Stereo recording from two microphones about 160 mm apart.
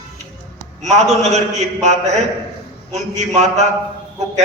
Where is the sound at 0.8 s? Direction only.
45° right (ahead or behind).